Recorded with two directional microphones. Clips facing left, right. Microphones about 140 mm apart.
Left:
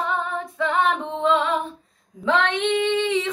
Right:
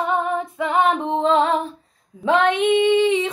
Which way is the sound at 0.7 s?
30° right (ahead or behind).